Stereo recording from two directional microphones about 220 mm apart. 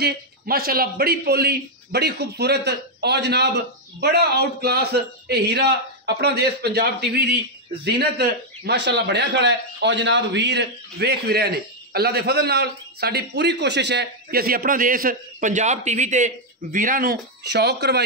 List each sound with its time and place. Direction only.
0.0 s a man's voice: 45° right (ahead or behind)